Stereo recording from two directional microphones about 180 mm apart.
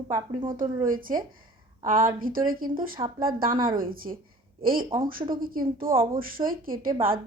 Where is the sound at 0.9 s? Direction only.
50° right (ahead or behind).